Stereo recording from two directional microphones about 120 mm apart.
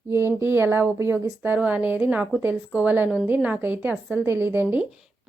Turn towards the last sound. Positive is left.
turn(degrees=-15)  # may be behind; listen again after turning